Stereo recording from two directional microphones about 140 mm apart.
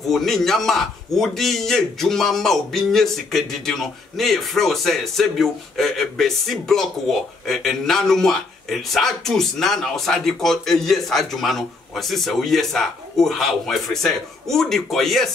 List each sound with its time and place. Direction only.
0.1 s a man's voice: centre (ahead or behind)